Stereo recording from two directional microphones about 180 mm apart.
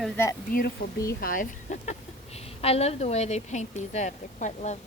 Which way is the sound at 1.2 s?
50° left (ahead or behind).